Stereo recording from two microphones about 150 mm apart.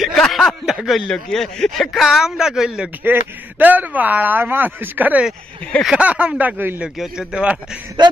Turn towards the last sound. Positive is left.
turn(degrees=-5)  # may be behind; listen again after turning